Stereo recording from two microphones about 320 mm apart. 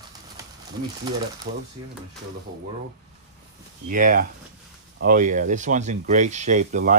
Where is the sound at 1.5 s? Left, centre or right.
Right.